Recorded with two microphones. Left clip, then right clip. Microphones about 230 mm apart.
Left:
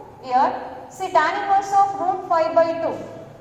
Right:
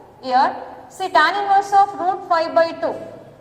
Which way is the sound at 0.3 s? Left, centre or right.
Right.